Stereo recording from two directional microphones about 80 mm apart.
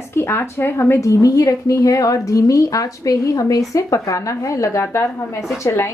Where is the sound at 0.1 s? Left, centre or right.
Left.